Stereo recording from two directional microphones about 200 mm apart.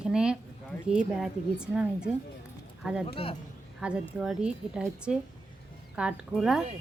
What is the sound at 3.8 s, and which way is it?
A woman's voice, 5° right (ahead or behind).